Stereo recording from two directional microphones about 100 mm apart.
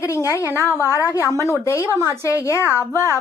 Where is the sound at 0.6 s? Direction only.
30° left (ahead or behind).